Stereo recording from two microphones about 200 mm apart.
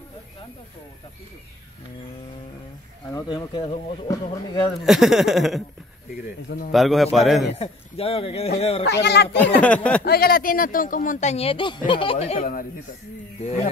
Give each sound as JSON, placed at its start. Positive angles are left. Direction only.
{"t": 3.1, "sound": "speech", "side_deg": 20}
{"t": 4.8, "sound": "speech", "side_deg": 0}
{"t": 6.7, "sound": "speech", "side_deg": 0}
{"t": 7.5, "sound": "speech", "side_deg": 30}
{"t": 8.9, "sound": "speech", "side_deg": 55}
{"t": 9.4, "sound": "speech", "side_deg": 5}
{"t": 10.0, "sound": "speech", "side_deg": 50}